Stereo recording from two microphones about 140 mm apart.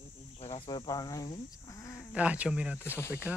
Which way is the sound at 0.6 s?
30° left (ahead or behind).